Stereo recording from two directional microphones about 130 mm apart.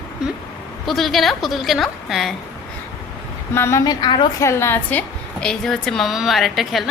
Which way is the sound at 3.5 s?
20° left (ahead or behind).